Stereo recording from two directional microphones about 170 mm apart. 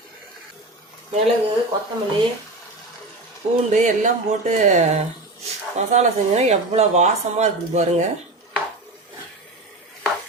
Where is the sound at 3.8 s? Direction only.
45° right (ahead or behind).